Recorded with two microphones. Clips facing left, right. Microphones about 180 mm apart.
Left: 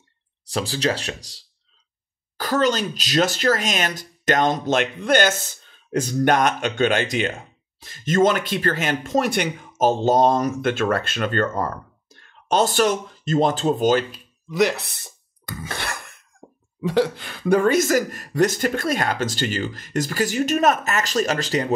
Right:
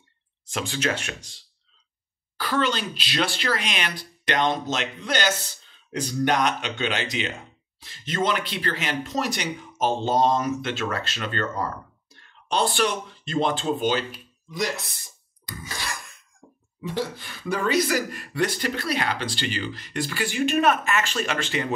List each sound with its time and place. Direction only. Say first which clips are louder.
0.5 s speech: left 4 dB; 35° left (ahead or behind)
14.5 s a sound: left 8 dB; 70° left (ahead or behind)
17.6 s speech: left 4 dB; 50° left (ahead or behind)